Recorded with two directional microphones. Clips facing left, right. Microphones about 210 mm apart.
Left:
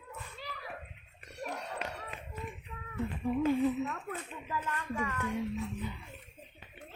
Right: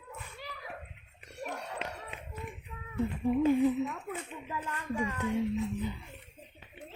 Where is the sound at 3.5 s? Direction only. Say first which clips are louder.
Right 2 dB; 15° right (ahead or behind).